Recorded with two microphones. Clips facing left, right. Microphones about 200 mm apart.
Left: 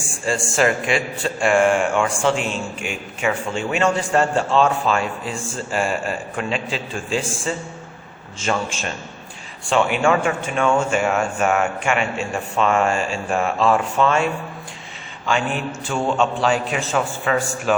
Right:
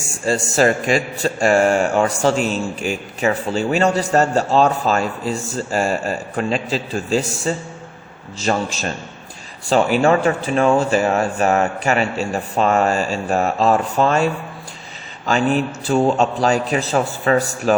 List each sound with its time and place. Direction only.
0.3 s a man's voice: 40° right (ahead or behind)
15.3 s a man's voice: 40° right (ahead or behind)